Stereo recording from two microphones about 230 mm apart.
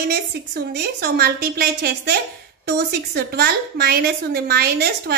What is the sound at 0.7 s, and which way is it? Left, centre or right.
A woman's voice, right.